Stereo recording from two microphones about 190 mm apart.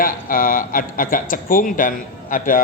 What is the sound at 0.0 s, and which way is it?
A man's voice, 45° left (ahead or behind).